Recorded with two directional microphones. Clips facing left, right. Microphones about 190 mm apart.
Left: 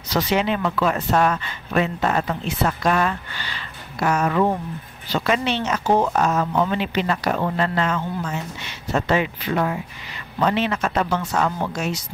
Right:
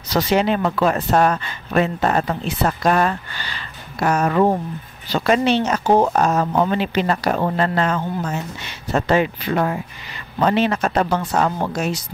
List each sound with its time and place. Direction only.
0.1 s speech: 40° right (ahead or behind)